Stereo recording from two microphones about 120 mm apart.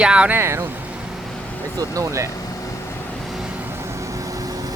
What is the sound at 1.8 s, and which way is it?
Speech, 30° right (ahead or behind).